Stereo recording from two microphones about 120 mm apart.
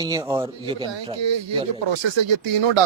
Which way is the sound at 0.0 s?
30° right (ahead or behind).